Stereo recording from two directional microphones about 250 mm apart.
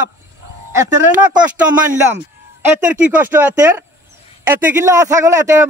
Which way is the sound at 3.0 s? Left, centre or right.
Centre.